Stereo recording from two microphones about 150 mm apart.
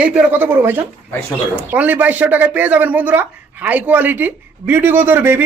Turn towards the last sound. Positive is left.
turn(degrees=-15)  # may be behind; listen again after turning